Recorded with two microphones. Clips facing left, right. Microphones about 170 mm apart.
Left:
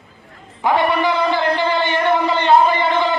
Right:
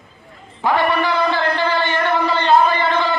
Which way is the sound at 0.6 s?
20° left (ahead or behind).